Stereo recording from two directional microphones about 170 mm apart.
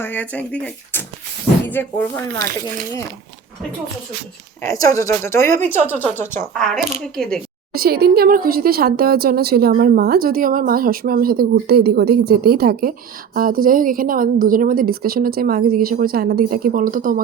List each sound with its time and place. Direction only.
0.0 s speech: 10° left (ahead or behind)
4.6 s speech: 20° left (ahead or behind); by 7.3 s 5° left (ahead or behind)
7.7 s speech: 65° right (ahead or behind)